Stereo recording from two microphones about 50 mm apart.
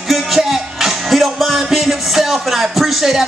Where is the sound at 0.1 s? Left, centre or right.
Centre.